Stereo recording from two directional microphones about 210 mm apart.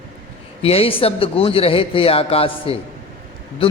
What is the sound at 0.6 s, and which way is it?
A man's voice, 30° left (ahead or behind).